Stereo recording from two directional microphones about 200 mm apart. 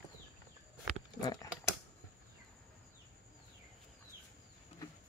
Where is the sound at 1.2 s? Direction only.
20° left (ahead or behind).